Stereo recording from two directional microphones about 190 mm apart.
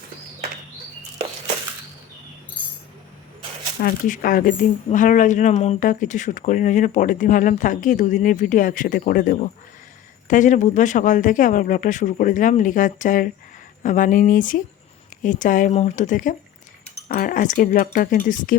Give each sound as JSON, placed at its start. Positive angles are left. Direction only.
{"t": 3.8, "sound": "speech", "side_deg": 50}